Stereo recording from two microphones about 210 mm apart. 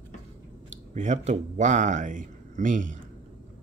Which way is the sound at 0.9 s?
35° right (ahead or behind).